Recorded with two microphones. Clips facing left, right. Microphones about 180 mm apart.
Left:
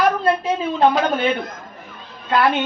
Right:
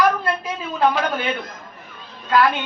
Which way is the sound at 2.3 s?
25° left (ahead or behind).